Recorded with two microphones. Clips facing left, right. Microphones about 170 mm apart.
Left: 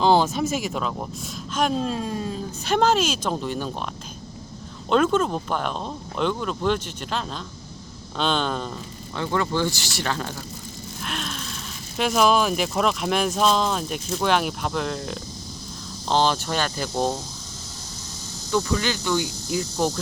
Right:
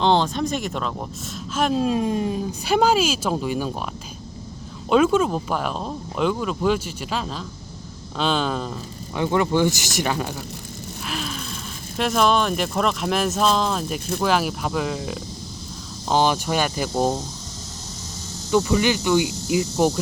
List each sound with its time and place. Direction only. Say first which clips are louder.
0.0 s speech: left 1 dB; 5° left (ahead or behind)
1.9 s speech: right 6 dB; 15° right (ahead or behind)
4.9 s speech: right 3 dB; 5° right (ahead or behind)
9.1 s speech: right 4 dB; 15° right (ahead or behind)
11.0 s a sound: right 2 dB; centre (ahead or behind)
11.9 s speech: even; centre (ahead or behind)
18.5 s speech: right 5 dB; 15° right (ahead or behind)